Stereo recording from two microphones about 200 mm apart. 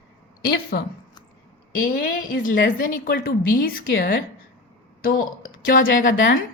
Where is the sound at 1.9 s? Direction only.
45° left (ahead or behind).